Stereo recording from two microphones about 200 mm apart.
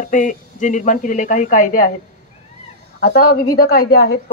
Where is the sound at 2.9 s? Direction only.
50° left (ahead or behind).